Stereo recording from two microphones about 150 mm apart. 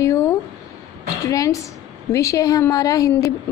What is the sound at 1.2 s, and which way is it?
A woman's voice, 20° left (ahead or behind).